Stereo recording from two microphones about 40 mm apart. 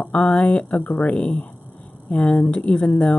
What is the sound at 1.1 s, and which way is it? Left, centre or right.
A woman's voice, left.